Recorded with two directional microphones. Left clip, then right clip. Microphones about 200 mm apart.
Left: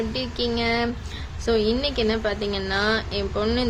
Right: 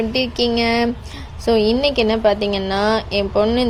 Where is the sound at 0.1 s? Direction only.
35° right (ahead or behind).